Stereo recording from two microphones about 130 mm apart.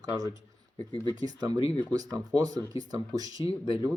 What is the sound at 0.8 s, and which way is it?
Speech, 35° left (ahead or behind).